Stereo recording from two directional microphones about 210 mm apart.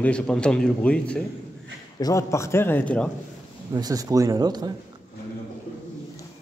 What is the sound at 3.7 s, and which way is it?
Speech, 15° right (ahead or behind).